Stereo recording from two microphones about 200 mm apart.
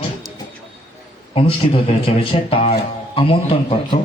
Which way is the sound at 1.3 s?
25° left (ahead or behind).